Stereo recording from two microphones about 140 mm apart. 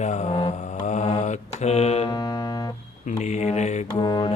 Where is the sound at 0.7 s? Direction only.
55° left (ahead or behind).